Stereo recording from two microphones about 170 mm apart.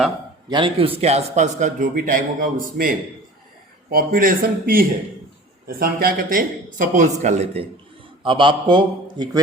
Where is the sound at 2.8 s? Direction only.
60° right (ahead or behind); by 7.6 s 40° right (ahead or behind).